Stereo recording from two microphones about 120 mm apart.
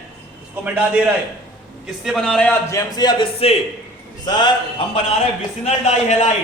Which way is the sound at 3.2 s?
55° left (ahead or behind).